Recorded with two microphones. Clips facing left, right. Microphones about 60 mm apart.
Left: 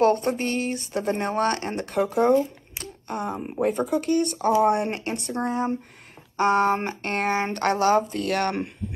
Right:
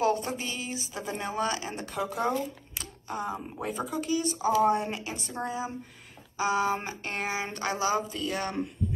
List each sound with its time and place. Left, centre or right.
0.0 s speech: left
2.8 s a sound: left
3.6 s speech: left